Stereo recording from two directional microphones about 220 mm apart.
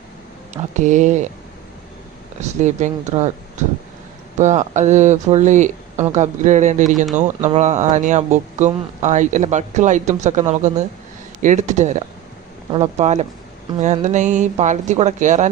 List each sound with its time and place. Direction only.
0.5 s speech: 35° right (ahead or behind)
2.4 s speech: 30° right (ahead or behind)
4.4 s speech: 35° right (ahead or behind)